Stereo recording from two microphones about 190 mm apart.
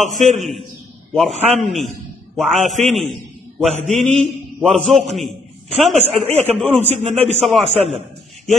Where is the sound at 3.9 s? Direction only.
40° right (ahead or behind).